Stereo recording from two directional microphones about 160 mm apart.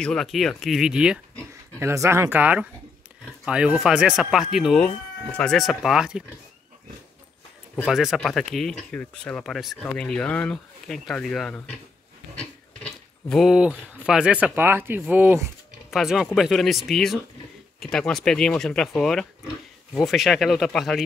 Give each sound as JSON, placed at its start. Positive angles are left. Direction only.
{"t": 0.0, "sound": "speech", "side_deg": 5}
{"t": 1.8, "sound": "speech", "side_deg": -15}
{"t": 7.9, "sound": "speech", "side_deg": 0}
{"t": 12.8, "sound": "a sound", "side_deg": 5}
{"t": 14.0, "sound": "speech", "side_deg": -5}
{"t": 15.9, "sound": "speech", "side_deg": 0}